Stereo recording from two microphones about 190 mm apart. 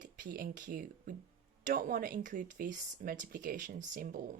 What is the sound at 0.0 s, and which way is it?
Speech, 45° right (ahead or behind).